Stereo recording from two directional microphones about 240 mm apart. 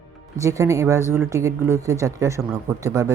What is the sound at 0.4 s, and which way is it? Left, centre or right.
Speech, centre.